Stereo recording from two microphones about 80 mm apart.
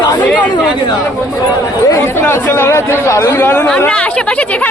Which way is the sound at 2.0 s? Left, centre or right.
Left.